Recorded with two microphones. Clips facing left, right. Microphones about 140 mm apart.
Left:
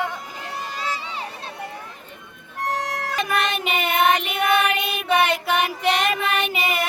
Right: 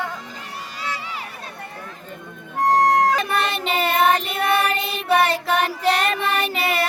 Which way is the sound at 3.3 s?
30° right (ahead or behind).